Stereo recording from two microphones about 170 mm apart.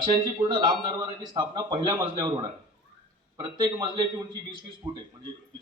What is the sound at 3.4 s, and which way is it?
A man's voice, 25° right (ahead or behind).